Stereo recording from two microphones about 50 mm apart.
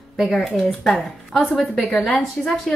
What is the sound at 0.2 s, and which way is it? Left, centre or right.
A woman's voice, centre.